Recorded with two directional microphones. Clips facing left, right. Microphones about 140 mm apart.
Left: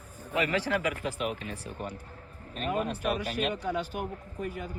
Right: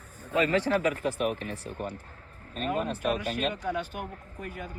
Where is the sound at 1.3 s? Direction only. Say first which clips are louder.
Right 3 dB; 15° left (ahead or behind).